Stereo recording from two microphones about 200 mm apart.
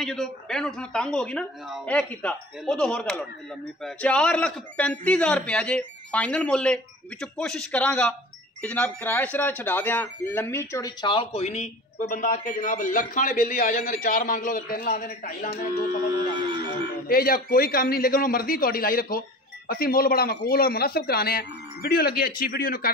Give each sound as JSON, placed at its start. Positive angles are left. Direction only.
{"t": 0.0, "sound": "a man's voice", "side_deg": 0}
{"t": 17.1, "sound": "speech", "side_deg": 45}